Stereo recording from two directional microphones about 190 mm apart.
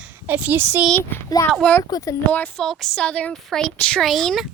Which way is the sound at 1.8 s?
20° left (ahead or behind).